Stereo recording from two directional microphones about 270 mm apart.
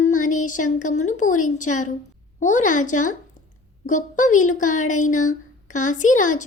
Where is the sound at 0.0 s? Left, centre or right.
Left.